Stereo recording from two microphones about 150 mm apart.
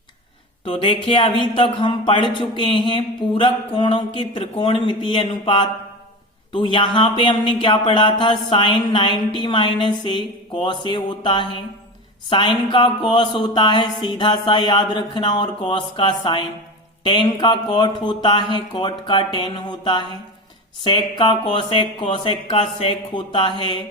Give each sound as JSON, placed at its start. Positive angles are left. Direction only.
{"t": 0.6, "sound": "speech", "side_deg": 35}